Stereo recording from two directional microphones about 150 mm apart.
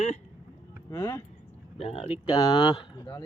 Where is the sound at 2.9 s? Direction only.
25° left (ahead or behind).